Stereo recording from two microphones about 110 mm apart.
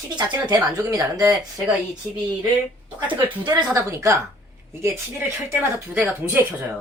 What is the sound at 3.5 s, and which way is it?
Speech, 30° right (ahead or behind).